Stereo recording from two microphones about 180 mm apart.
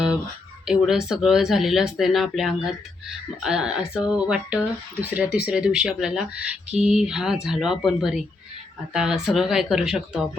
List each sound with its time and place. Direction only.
0.7 s speech: centre (ahead or behind)